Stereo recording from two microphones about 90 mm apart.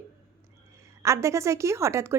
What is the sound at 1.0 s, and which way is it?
A woman's voice, 35° right (ahead or behind).